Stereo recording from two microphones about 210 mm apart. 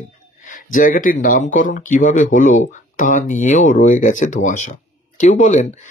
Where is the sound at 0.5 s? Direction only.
40° left (ahead or behind).